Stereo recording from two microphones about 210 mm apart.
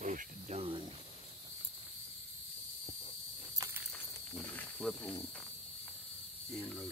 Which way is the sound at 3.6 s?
10° right (ahead or behind).